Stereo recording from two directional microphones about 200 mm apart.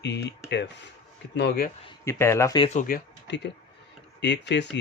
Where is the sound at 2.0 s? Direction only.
15° left (ahead or behind).